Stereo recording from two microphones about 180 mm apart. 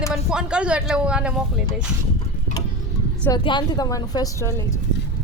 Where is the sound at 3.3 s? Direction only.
25° left (ahead or behind).